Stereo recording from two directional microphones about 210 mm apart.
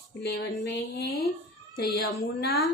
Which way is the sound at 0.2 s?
50° left (ahead or behind).